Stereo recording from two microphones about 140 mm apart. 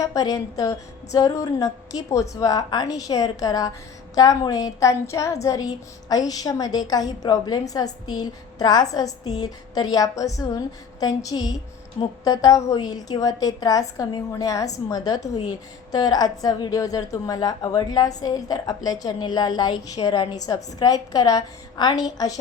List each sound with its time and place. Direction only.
0.0 s a woman's voice: 25° left (ahead or behind)
15.2 s a woman's voice: 55° left (ahead or behind)
15.4 s a woman's voice: 30° left (ahead or behind)